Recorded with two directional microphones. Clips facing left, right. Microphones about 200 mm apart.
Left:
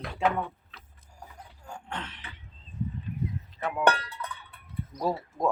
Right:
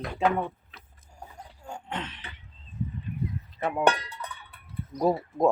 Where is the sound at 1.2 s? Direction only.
25° right (ahead or behind).